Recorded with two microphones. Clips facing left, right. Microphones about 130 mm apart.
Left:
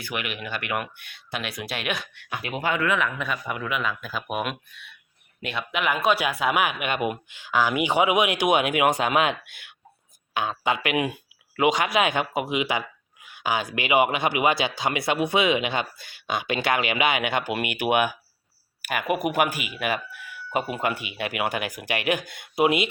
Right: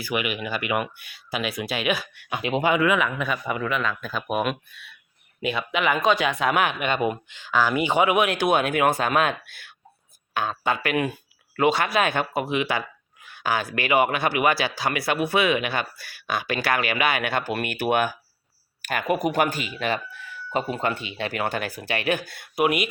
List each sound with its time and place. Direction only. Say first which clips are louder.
0.0 s a man's voice: right 5 dB; 5° right (ahead or behind)
2.3 s speech: right 5 dB; 20° right (ahead or behind)
2.7 s a man's voice: right 3 dB; 5° right (ahead or behind); by 22.9 s 25° left (ahead or behind)